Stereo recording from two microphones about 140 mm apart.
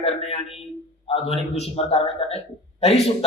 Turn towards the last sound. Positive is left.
turn(degrees=45)  # may be behind; listen again after turning